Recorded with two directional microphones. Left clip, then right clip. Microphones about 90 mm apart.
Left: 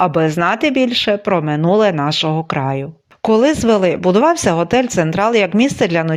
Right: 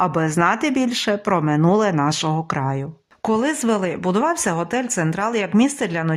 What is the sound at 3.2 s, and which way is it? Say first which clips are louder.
Speech: left 7 dB; 25° left (ahead or behind).